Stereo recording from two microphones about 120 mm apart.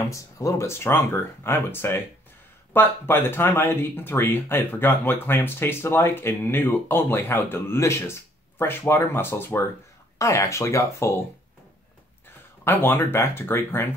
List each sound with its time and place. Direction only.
0.0 s speech: 25° left (ahead or behind)
12.6 s speech: 20° left (ahead or behind)